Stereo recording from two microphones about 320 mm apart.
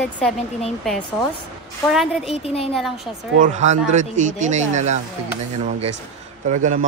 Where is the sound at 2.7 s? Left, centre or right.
Centre.